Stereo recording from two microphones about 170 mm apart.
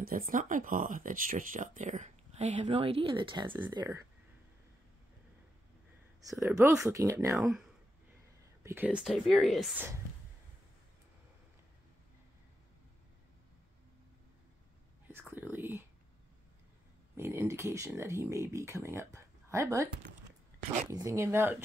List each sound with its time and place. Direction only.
0.0 s speech: 55° right (ahead or behind); by 3.5 s 30° right (ahead or behind)
3.7 s speech: 20° right (ahead or behind)
6.5 s speech: 5° right (ahead or behind)
6.8 s speech: 15° right (ahead or behind)
8.6 s speech: 10° right (ahead or behind)
15.2 s whispering: 10° right (ahead or behind)
17.2 s speech: 15° right (ahead or behind)
20.9 s speech: 15° right (ahead or behind)